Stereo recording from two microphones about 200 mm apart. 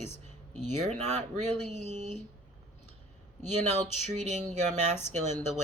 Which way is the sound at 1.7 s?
35° right (ahead or behind).